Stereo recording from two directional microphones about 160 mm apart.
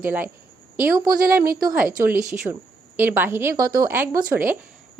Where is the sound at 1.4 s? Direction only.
65° right (ahead or behind).